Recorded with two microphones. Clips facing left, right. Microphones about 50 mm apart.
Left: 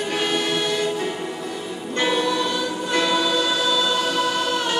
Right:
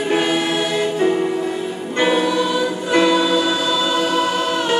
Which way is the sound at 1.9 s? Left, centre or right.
Centre.